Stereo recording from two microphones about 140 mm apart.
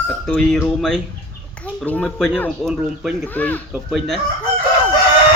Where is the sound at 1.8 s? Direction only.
10° left (ahead or behind).